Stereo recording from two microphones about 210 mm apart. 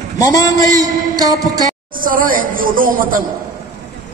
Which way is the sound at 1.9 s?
40° right (ahead or behind).